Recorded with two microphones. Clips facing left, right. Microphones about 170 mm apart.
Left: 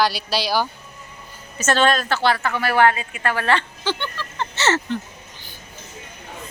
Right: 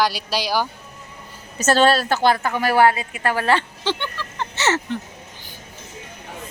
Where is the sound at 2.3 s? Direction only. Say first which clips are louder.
Right 2 dB; 15° right (ahead or behind).